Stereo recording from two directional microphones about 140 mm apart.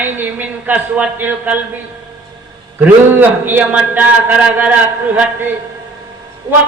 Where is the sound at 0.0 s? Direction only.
15° right (ahead or behind).